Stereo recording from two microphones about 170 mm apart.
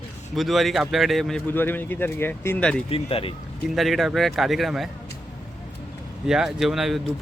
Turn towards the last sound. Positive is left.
turn(degrees=0)  # may be behind; listen again after turning